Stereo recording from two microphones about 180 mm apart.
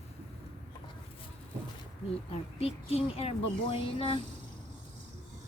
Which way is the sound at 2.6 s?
35° left (ahead or behind).